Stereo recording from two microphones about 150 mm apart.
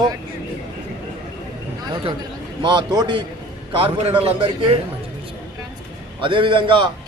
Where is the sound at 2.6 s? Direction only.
30° right (ahead or behind).